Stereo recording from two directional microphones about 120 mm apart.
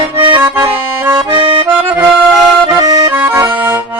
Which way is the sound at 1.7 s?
15° right (ahead or behind).